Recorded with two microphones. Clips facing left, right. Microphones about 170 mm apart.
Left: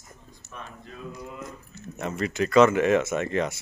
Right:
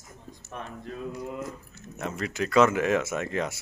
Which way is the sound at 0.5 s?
60° right (ahead or behind).